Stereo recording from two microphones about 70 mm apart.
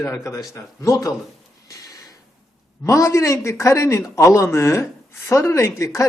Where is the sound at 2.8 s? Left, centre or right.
Left.